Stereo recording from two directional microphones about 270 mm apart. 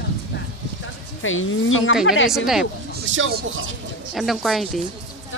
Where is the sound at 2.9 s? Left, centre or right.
Right.